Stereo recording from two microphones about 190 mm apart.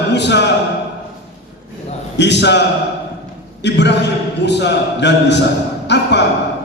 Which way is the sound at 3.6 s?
65° left (ahead or behind).